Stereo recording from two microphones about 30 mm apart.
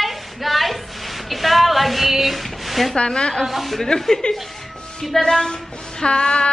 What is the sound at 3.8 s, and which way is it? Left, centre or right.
Child singing, centre.